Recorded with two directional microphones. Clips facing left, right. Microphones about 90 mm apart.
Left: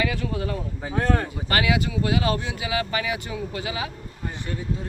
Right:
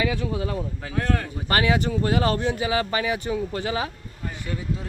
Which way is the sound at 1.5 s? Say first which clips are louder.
Right 2 dB; 35° right (ahead or behind).